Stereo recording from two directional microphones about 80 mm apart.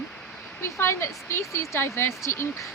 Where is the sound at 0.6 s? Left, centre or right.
Left.